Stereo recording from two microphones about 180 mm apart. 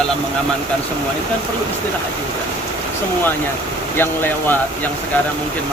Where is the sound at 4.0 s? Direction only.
10° left (ahead or behind).